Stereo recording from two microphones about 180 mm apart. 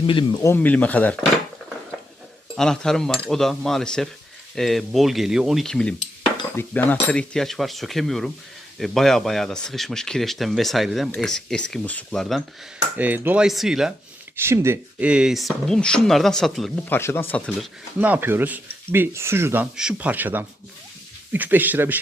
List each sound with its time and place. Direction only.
0.0 s speech: 30° left (ahead or behind)
0.4 s speech: 10° left (ahead or behind)
2.6 s speech: 5° left (ahead or behind)
13.0 s speech: 10° right (ahead or behind)
14.3 s speech: 15° right (ahead or behind); by 16.7 s centre (ahead or behind)
16.9 s speech: 15° left (ahead or behind)
18.0 s speech: 10° right (ahead or behind)